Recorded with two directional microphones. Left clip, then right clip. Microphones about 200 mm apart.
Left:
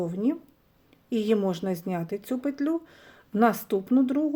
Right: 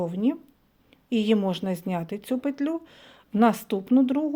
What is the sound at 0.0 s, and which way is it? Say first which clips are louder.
Speech: right 1 dB; 30° right (ahead or behind).